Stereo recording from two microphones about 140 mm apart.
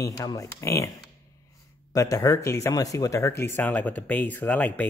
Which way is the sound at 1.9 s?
25° left (ahead or behind).